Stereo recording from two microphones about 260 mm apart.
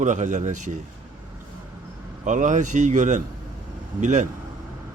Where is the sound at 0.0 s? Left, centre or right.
Right.